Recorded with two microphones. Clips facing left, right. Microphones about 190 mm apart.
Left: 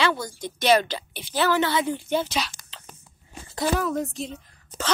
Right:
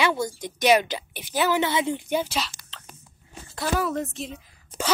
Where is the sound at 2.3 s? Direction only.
5° left (ahead or behind).